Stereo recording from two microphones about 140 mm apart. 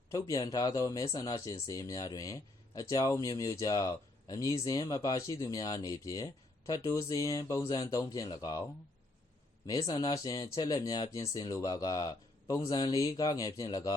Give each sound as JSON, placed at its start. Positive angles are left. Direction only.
{"t": 0.1, "sound": "speech", "side_deg": 25}
{"t": 9.8, "sound": "speech", "side_deg": 25}